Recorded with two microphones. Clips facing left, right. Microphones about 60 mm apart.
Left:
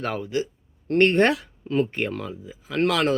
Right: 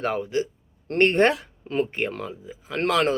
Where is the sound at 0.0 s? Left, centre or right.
Right.